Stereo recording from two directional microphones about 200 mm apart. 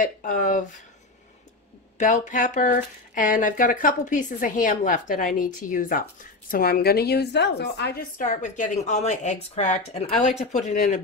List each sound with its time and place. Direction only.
0.0 s a woman's voice: 40° left (ahead or behind)
2.0 s a woman's voice: 40° left (ahead or behind)